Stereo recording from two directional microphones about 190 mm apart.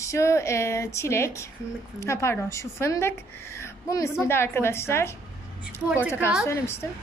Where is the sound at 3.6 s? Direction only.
15° left (ahead or behind).